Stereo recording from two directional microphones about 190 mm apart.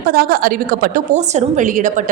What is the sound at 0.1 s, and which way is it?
A woman's voice, 50° right (ahead or behind).